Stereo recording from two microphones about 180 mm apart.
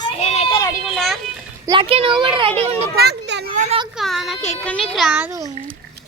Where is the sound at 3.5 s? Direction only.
40° right (ahead or behind).